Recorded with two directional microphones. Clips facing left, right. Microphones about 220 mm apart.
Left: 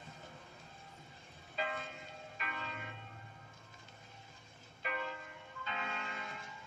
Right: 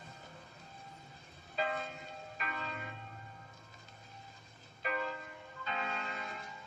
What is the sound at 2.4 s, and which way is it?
Church bell, 40° right (ahead or behind).